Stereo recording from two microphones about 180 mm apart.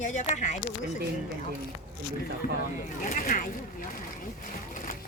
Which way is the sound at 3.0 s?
50° left (ahead or behind).